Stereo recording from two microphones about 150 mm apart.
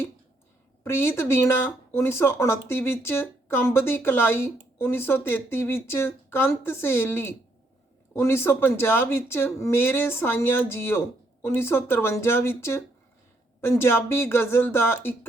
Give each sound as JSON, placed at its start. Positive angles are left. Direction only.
{"t": 0.9, "sound": "speech", "side_deg": 15}